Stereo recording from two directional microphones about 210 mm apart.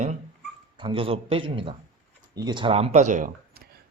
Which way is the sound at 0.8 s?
25° right (ahead or behind).